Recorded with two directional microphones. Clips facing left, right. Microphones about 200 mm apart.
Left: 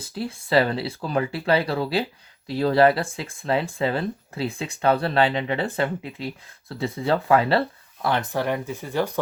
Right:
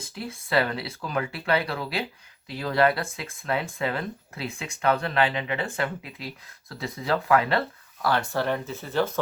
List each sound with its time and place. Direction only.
0.1 s speech: 30° left (ahead or behind)
8.0 s speech: 20° left (ahead or behind)